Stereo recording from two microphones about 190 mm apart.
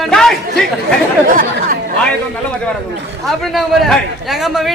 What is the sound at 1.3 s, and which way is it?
Chatter, 45° right (ahead or behind).